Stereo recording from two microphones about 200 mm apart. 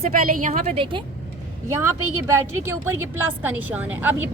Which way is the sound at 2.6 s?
10° right (ahead or behind).